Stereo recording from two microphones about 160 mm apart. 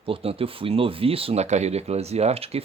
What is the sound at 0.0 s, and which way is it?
Speech, 35° right (ahead or behind).